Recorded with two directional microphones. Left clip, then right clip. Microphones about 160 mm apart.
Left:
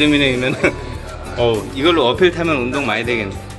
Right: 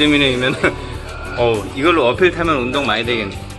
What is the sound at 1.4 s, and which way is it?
Speech, 30° left (ahead or behind).